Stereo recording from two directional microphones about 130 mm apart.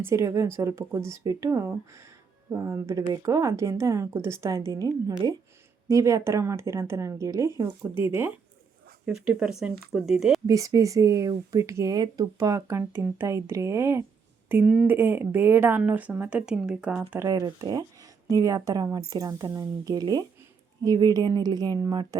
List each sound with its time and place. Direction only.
0.0 s speech: 25° right (ahead or behind)
9.0 s speech: 5° right (ahead or behind)
10.4 s speech: 25° right (ahead or behind)
14.5 s speech: 10° right (ahead or behind)
17.2 s speech: 25° right (ahead or behind)